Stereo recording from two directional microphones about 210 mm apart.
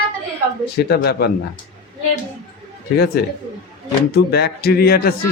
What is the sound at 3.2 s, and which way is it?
Speech, 50° left (ahead or behind).